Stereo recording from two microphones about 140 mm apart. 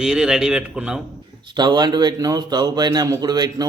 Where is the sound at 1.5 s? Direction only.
30° right (ahead or behind).